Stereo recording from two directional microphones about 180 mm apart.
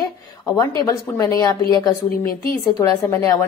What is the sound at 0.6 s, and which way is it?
A woman's voice, 15° left (ahead or behind).